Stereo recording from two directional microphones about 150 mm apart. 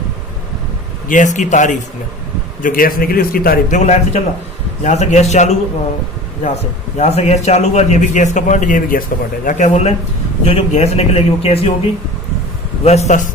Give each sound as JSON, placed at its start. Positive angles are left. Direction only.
{"t": 1.0, "sound": "a man's voice", "side_deg": 60}
{"t": 2.6, "sound": "a man's voice", "side_deg": 65}
{"t": 3.8, "sound": "a man's voice", "side_deg": 50}
{"t": 6.9, "sound": "a man's voice", "side_deg": 50}
{"t": 12.8, "sound": "a man's voice", "side_deg": 45}